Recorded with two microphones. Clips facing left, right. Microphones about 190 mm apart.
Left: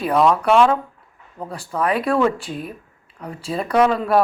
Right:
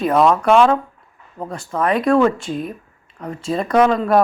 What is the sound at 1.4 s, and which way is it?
Speech, 35° left (ahead or behind).